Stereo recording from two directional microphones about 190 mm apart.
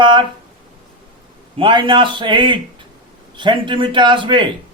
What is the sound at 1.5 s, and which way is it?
A man's voice, 25° right (ahead or behind).